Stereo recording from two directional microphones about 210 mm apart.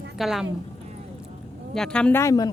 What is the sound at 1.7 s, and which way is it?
Speech, 5° left (ahead or behind).